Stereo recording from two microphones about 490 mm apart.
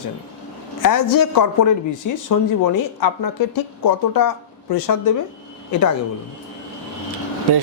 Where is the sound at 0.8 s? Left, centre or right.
Left.